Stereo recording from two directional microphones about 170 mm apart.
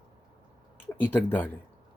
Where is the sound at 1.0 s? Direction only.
10° left (ahead or behind).